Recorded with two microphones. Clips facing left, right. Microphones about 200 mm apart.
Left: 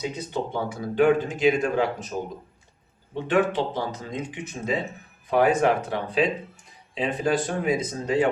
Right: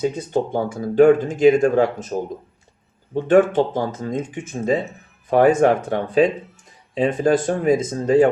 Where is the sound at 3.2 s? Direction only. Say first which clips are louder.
Right 8 dB; 45° right (ahead or behind).